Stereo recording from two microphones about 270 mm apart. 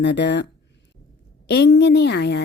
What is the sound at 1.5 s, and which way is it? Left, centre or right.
Speech, left.